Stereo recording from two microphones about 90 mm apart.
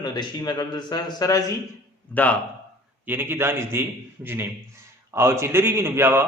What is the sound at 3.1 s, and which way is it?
Speech, 25° right (ahead or behind).